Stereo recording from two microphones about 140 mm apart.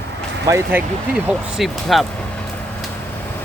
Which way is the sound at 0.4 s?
20° right (ahead or behind).